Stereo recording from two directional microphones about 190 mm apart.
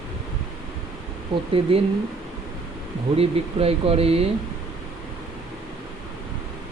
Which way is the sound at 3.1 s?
30° right (ahead or behind).